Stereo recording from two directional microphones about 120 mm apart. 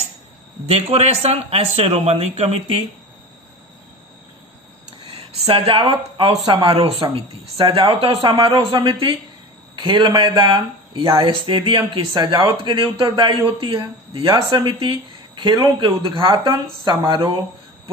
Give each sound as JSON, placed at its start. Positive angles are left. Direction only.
{"t": 0.7, "sound": "a man's voice", "side_deg": -55}
{"t": 5.0, "sound": "speech", "side_deg": -55}